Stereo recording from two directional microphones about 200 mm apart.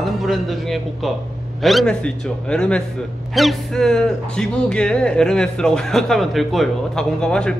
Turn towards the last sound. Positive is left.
turn(degrees=5)  # may be behind; listen again after turning